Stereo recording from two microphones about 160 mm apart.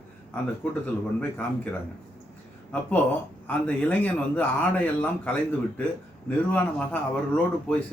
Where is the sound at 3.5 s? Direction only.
10° left (ahead or behind).